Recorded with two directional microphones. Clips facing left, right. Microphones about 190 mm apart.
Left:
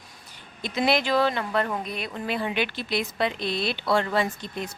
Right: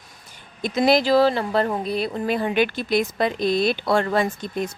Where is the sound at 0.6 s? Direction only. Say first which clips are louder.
Right 6 dB; 40° right (ahead or behind).